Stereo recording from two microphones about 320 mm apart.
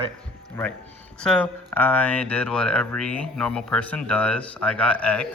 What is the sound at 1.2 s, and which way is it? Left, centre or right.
Speech, centre.